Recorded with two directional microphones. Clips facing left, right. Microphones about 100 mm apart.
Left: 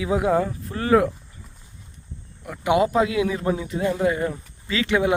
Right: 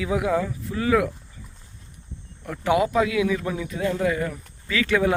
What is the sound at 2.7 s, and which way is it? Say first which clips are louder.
A man's voice: left 1 dB; 25° left (ahead or behind).